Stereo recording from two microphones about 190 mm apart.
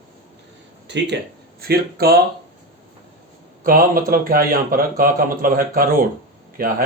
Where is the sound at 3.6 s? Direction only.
50° right (ahead or behind).